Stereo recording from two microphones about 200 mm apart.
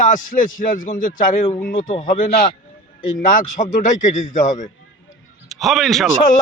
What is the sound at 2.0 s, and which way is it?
A man's voice, 50° left (ahead or behind).